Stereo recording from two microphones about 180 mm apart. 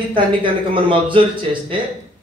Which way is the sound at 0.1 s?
30° right (ahead or behind).